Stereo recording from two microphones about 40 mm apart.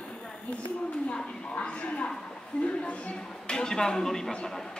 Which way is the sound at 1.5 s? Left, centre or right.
Left.